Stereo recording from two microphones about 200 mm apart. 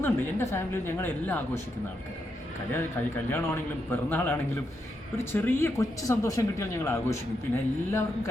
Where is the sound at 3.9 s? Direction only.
10° left (ahead or behind).